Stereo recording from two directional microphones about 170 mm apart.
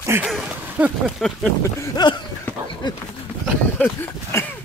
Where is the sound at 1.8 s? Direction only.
25° left (ahead or behind).